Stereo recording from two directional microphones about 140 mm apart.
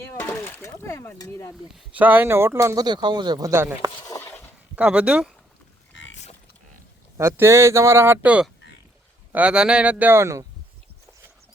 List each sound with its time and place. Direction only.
0.1 s speech: 15° left (ahead or behind)
1.6 s speech: 10° right (ahead or behind)
2.8 s speech: 30° right (ahead or behind); by 5.3 s 5° right (ahead or behind)
7.2 s speech: 20° right (ahead or behind)